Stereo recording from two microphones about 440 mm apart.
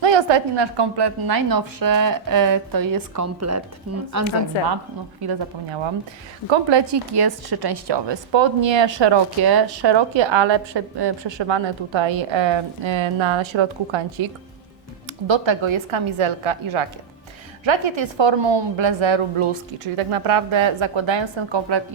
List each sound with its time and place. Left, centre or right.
0.0 s a woman's voice: right
3.9 s speech: right
4.5 s a woman's voice: left
5.2 s a woman's voice: right
15.3 s a woman's voice: right